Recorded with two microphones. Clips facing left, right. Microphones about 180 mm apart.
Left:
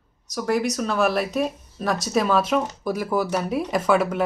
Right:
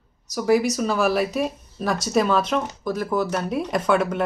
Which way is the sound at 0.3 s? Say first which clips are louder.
Right 4 dB; 5° right (ahead or behind).